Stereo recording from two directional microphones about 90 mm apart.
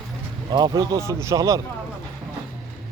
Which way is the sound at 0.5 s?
50° right (ahead or behind).